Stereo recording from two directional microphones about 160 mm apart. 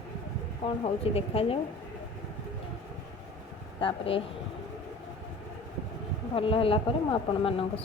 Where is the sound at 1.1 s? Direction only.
35° left (ahead or behind).